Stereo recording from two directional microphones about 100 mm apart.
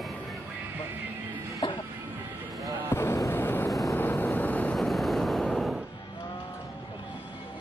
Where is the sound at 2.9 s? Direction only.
30° left (ahead or behind).